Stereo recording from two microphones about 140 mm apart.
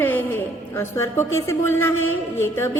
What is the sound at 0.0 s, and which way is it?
A woman's voice, 15° left (ahead or behind).